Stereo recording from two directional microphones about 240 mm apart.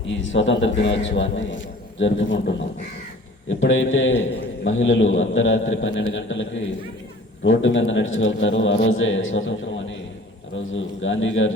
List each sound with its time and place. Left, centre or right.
0.1 s a man's voice: left
3.5 s a man's voice: left